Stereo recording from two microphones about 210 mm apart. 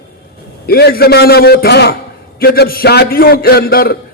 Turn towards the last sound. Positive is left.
turn(degrees=45)  # may be behind; listen again after turning